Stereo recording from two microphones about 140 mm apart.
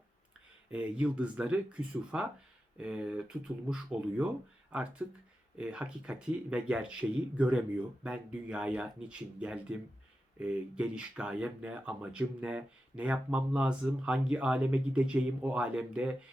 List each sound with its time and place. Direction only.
0.7 s speech: 10° right (ahead or behind)